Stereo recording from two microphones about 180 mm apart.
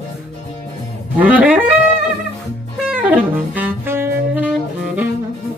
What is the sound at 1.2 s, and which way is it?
Music, 10° right (ahead or behind).